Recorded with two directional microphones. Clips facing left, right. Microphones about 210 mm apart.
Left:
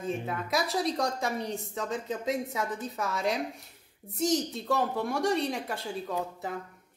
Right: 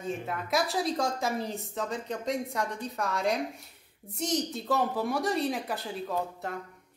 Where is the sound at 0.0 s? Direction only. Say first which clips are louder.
Left 1 dB; centre (ahead or behind).